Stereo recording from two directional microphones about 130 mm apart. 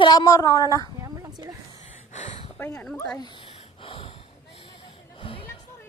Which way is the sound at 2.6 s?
15° left (ahead or behind).